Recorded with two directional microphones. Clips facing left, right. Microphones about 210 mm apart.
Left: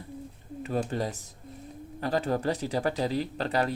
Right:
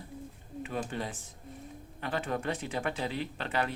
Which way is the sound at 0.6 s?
40° left (ahead or behind).